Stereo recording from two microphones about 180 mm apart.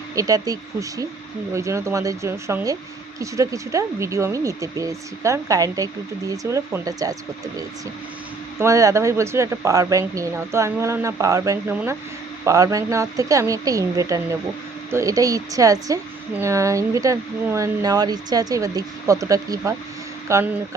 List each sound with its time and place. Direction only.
0.2 s a woman's voice: 20° right (ahead or behind)
8.5 s a woman's voice: 15° right (ahead or behind)